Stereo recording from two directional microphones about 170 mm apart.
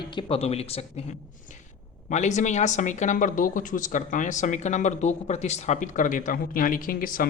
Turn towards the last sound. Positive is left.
turn(degrees=55)  # may be behind; listen again after turning